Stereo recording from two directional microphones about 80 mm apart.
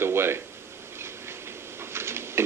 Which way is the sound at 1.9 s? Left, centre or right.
Right.